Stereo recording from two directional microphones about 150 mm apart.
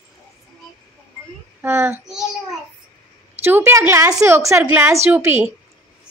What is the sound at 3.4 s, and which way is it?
A woman's voice, 15° right (ahead or behind).